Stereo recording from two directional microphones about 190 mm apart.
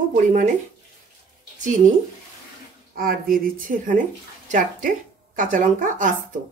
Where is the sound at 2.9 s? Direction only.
50° right (ahead or behind).